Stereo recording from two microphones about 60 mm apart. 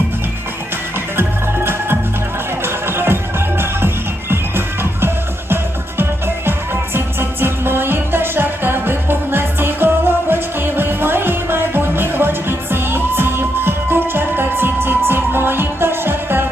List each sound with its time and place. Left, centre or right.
2.6 s music: right